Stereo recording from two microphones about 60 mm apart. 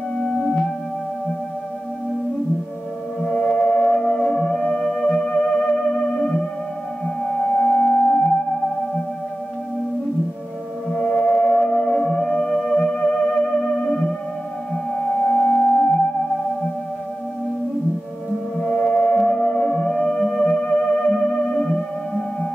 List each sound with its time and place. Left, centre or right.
0.2 s music: centre
3.2 s music: centre
7.5 s singing bowl: centre
10.9 s theremin: centre
15.2 s singing bowl: centre
18.6 s music: centre
19.1 s theremin: centre